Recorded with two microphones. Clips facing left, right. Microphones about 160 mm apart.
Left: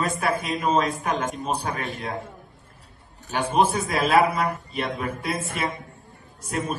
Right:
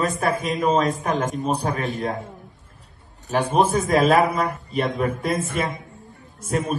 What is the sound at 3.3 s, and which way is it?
A man's voice, 40° right (ahead or behind).